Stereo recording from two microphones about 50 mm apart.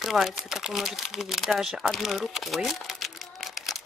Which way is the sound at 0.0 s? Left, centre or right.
Centre.